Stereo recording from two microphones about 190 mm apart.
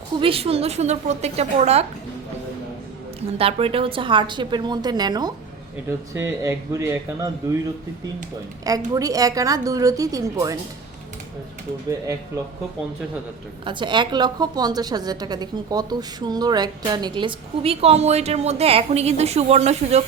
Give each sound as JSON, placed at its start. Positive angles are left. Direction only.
{"t": 0.2, "sound": "a woman's voice", "side_deg": -30}
{"t": 3.2, "sound": "a woman's voice", "side_deg": -30}
{"t": 6.4, "sound": "speech", "side_deg": -15}
{"t": 8.6, "sound": "a woman's voice", "side_deg": -20}
{"t": 13.7, "sound": "a woman's voice", "side_deg": -25}